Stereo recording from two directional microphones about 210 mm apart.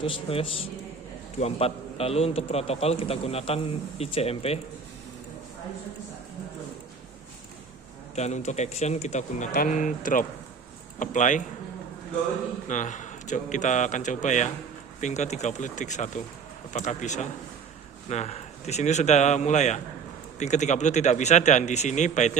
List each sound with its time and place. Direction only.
0.0 s a man's voice: 25° left (ahead or behind)
8.1 s speech: 30° left (ahead or behind)
12.6 s speech: 35° left (ahead or behind)